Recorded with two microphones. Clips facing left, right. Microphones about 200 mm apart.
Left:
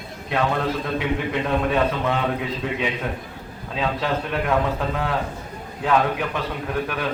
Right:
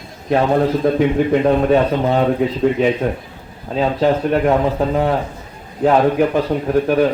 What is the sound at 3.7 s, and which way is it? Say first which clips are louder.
A man's voice: right 8 dB; 40° right (ahead or behind).